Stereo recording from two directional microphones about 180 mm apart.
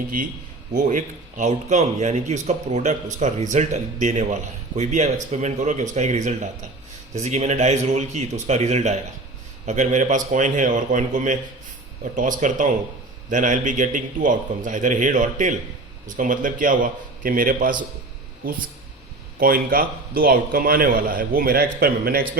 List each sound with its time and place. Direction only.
0.7 s a man's voice: 45° right (ahead or behind)
19.4 s a man's voice: 55° right (ahead or behind)